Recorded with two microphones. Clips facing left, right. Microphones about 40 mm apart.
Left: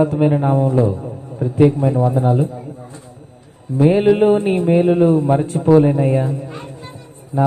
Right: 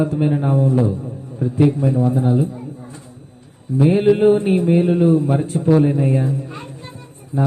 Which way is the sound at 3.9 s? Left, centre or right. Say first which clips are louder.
Left 1 dB; left.